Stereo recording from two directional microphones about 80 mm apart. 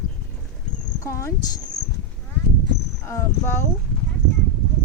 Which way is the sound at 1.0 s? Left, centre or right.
Left.